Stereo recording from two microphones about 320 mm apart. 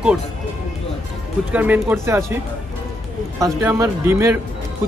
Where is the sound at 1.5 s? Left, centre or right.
Centre.